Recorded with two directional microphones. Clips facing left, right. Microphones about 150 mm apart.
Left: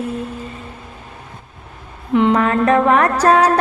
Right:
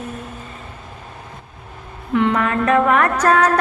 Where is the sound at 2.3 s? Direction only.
30° left (ahead or behind).